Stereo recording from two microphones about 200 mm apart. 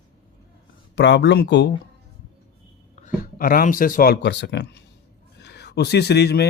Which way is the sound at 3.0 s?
45° left (ahead or behind).